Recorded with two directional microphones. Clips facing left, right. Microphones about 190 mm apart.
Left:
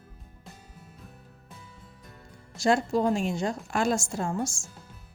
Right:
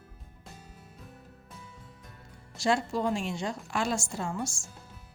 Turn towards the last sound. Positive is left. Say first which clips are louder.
# left 4 dB
turn(degrees=45)  # may be behind; listen again after turning